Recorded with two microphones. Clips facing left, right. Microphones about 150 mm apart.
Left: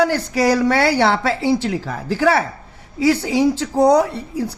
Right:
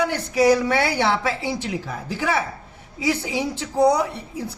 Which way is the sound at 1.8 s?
90° left.